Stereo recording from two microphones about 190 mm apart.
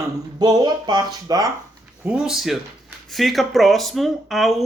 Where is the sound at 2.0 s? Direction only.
5° right (ahead or behind).